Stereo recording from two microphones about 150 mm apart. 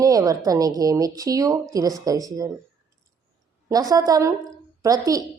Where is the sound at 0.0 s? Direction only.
25° right (ahead or behind).